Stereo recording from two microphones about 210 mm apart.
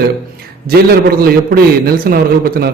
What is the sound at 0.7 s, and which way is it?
A man's voice, 45° right (ahead or behind).